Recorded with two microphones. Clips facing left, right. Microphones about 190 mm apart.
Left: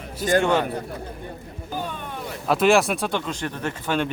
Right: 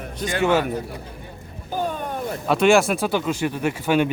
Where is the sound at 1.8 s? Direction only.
45° right (ahead or behind).